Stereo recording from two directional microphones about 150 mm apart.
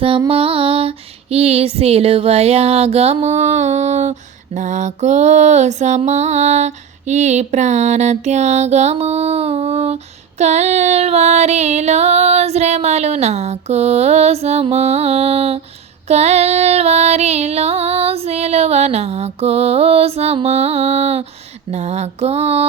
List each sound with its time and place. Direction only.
0.3 s music: 40° right (ahead or behind)